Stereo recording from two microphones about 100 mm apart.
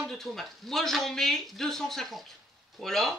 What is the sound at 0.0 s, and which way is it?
Speech, centre (ahead or behind).